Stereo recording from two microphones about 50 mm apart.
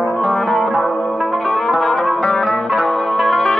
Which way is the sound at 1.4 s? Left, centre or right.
Centre.